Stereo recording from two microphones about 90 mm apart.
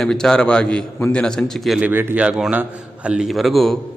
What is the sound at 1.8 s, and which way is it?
A man's voice, 20° right (ahead or behind).